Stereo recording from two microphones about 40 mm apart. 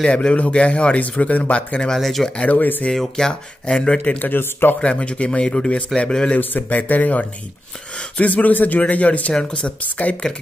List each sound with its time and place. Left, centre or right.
0.0 s speech: left
2.0 s speech: centre
2.4 s speech: left
2.9 s speech: centre
4.2 s a man's voice: left
4.7 s speech: left
6.7 s speech: left